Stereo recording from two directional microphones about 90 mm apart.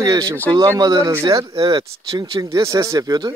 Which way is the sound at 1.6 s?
65° right (ahead or behind).